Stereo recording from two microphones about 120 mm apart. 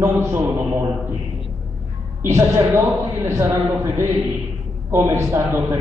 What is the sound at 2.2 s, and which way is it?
A man's voice, 25° right (ahead or behind).